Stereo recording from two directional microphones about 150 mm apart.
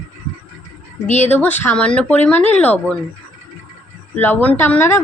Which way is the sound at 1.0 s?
50° left (ahead or behind).